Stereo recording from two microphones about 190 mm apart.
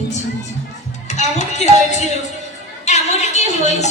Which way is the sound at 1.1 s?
35° left (ahead or behind).